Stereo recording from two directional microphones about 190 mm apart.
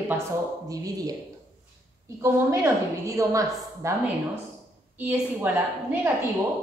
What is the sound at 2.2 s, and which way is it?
A woman's voice, 15° right (ahead or behind).